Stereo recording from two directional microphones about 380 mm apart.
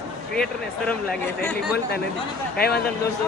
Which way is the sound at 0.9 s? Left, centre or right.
Centre.